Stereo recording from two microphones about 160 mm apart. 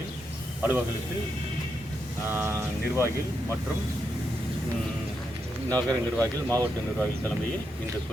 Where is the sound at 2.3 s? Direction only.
15° right (ahead or behind).